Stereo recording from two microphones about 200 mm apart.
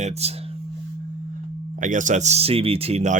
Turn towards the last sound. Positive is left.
turn(degrees=-35)  # may be behind; listen again after turning